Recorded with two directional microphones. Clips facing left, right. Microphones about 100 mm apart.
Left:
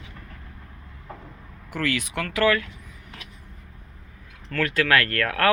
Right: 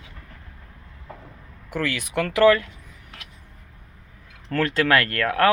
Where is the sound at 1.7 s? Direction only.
15° right (ahead or behind).